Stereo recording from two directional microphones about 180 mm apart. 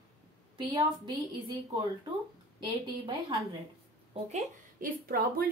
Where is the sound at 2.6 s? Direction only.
25° right (ahead or behind).